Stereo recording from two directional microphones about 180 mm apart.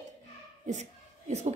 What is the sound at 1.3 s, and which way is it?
Speech, 40° right (ahead or behind).